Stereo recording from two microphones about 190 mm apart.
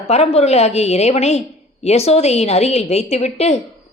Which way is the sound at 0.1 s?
35° left (ahead or behind).